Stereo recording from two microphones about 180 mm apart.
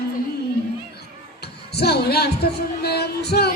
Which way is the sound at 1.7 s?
65° left (ahead or behind).